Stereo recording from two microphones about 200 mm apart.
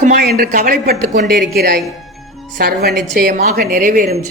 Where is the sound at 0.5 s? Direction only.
45° right (ahead or behind).